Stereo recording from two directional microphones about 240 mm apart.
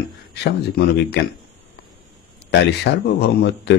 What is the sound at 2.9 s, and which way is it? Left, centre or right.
Speech, left.